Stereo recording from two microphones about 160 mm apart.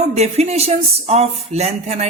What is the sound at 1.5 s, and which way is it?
Speech, 40° right (ahead or behind).